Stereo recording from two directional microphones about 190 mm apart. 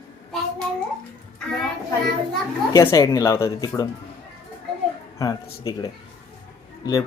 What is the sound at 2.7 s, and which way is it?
Speech, 20° left (ahead or behind).